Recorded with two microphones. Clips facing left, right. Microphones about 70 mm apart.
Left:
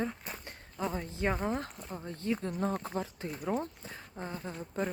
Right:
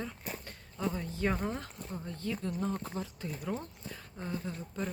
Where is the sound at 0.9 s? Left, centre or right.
Left.